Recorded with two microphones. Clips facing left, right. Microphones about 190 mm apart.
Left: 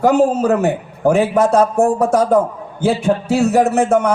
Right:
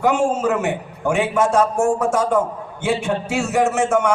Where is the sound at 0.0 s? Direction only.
35° left (ahead or behind).